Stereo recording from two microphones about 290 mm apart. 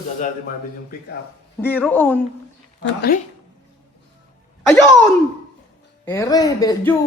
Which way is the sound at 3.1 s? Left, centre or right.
Left.